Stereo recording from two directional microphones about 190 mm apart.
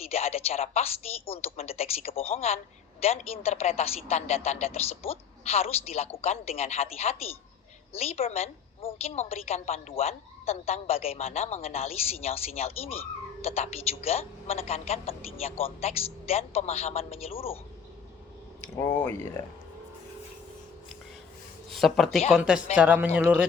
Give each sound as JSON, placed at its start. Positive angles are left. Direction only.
{"t": 0.1, "sound": "a woman's voice", "side_deg": 30}
{"t": 18.8, "sound": "speech", "side_deg": 15}
{"t": 21.7, "sound": "speech", "side_deg": 0}